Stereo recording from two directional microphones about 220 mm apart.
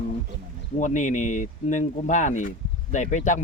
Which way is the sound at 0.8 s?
35° left (ahead or behind).